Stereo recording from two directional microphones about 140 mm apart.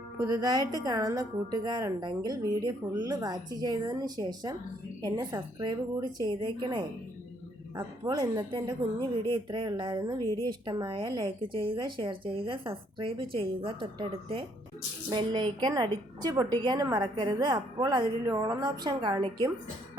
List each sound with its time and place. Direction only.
0.3 s a woman's voice: 30° right (ahead or behind)